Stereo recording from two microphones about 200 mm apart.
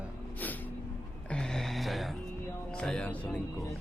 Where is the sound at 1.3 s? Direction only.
5° left (ahead or behind).